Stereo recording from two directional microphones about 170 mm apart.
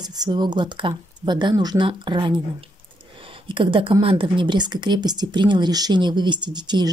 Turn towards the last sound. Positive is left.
turn(degrees=-25)  # may be behind; listen again after turning